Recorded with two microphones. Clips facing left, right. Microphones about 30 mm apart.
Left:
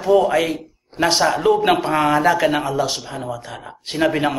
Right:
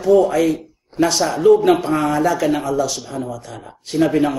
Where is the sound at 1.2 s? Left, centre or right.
Centre.